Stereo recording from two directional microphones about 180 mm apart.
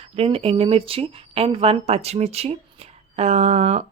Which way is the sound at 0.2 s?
35° right (ahead or behind).